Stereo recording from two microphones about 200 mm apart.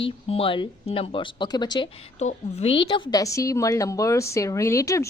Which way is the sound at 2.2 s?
35° left (ahead or behind).